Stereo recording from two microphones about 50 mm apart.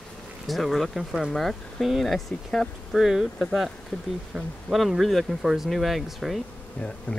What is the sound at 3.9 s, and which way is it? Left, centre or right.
Speech, centre.